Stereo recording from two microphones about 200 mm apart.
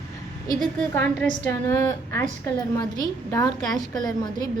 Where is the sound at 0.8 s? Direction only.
10° left (ahead or behind).